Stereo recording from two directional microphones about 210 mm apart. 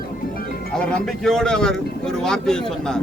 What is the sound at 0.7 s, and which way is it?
Speech, 5° left (ahead or behind).